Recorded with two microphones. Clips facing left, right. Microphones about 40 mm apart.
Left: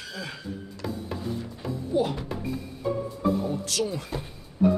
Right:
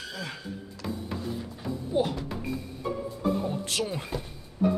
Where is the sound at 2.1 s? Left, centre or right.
Centre.